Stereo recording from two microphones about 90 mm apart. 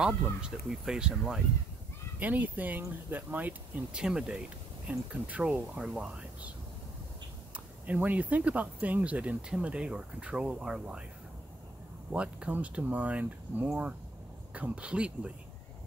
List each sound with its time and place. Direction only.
0.0 s speech: 10° right (ahead or behind)
2.1 s speech: 20° right (ahead or behind)
7.8 s speech: 15° right (ahead or behind)
12.1 s speech: 10° right (ahead or behind)